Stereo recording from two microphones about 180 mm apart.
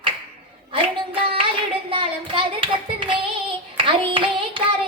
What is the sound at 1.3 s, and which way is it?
Hands, 30° right (ahead or behind).